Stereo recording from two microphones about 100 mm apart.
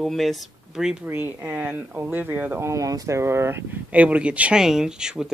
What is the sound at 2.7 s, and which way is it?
Speech, 35° right (ahead or behind).